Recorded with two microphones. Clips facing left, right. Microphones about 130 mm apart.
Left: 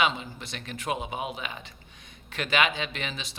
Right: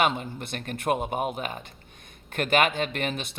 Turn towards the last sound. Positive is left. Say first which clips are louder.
# right 6 dB
turn(degrees=-55)  # may be behind; listen again after turning